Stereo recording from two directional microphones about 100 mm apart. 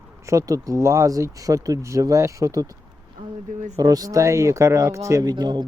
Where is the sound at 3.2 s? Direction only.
55° right (ahead or behind).